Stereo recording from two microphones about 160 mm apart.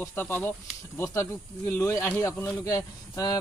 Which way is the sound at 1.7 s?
20° left (ahead or behind).